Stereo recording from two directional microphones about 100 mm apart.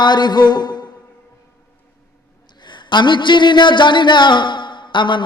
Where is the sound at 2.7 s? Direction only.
50° left (ahead or behind).